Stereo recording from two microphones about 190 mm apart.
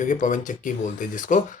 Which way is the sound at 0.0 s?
45° left (ahead or behind).